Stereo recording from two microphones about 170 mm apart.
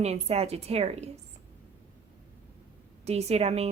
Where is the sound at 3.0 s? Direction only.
40° right (ahead or behind).